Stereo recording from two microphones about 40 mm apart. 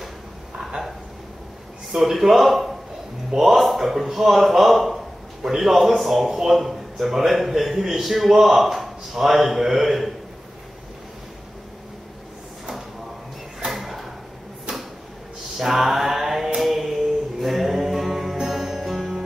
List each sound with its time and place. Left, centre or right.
1.9 s a man's voice: centre
13.7 s drawer open or close: centre
15.6 s mantra: centre
18.4 s music: centre